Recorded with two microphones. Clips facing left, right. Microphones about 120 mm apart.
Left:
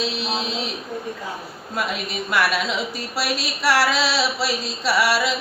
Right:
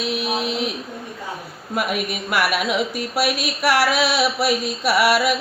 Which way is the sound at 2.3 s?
15° right (ahead or behind).